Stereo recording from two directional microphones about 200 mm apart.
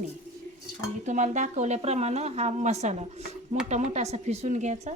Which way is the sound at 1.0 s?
35° right (ahead or behind).